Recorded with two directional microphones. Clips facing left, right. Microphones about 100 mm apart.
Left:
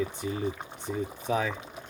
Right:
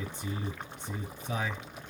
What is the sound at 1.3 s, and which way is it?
Speech, 90° left.